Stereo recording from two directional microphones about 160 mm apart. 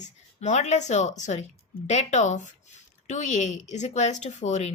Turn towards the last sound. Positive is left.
turn(degrees=45)  # may be behind; listen again after turning